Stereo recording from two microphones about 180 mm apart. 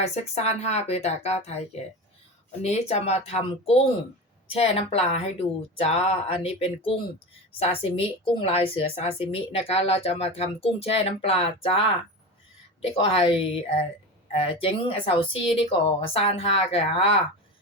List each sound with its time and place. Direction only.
0.2 s a woman's voice: 35° left (ahead or behind)